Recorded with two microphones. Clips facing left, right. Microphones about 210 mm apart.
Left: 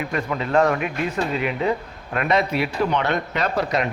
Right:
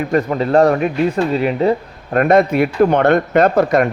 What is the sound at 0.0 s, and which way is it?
Speech, 40° right (ahead or behind).